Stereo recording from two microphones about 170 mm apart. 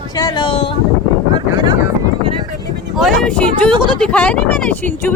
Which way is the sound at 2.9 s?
Centre (ahead or behind).